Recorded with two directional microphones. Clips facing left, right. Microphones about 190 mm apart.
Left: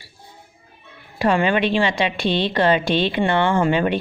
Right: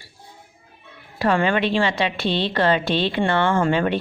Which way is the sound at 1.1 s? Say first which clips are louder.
Left 1 dB; 15° left (ahead or behind).